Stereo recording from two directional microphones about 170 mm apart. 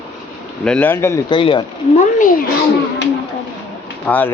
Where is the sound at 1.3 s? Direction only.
30° left (ahead or behind).